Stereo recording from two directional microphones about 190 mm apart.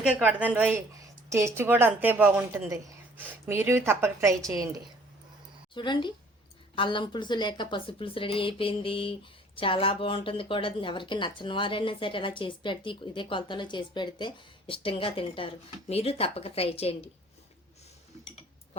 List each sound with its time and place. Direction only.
0.2 s speech: 5° right (ahead or behind)
5.7 s speech: 25° left (ahead or behind)